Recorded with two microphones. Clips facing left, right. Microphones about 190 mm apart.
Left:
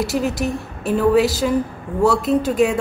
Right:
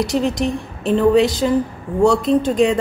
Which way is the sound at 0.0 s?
5° left (ahead or behind).